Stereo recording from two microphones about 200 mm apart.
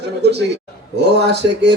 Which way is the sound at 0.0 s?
55° right (ahead or behind).